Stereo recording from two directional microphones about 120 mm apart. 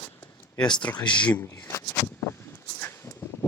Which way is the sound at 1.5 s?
20° left (ahead or behind).